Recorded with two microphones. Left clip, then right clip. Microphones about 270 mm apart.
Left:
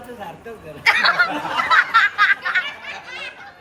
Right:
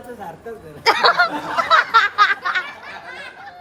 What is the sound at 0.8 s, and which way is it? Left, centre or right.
Snicker, centre.